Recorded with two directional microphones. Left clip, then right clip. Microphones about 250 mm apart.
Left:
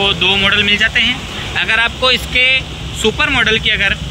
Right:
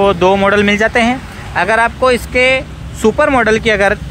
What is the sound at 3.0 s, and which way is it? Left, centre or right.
Speech, centre.